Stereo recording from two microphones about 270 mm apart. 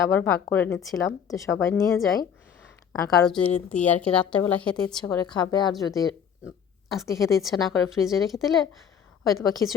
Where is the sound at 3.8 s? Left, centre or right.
Centre.